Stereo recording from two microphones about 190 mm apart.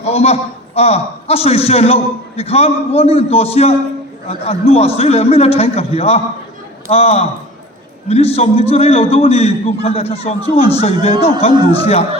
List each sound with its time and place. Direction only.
0.0 s a man's voice: 35° left (ahead or behind)